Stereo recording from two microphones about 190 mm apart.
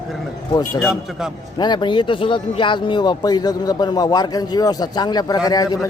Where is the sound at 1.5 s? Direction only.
20° left (ahead or behind).